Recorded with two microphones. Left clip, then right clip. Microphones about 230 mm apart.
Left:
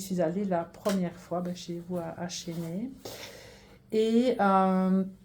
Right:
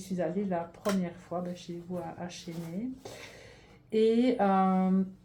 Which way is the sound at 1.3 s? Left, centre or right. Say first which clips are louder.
Left 2 dB; left.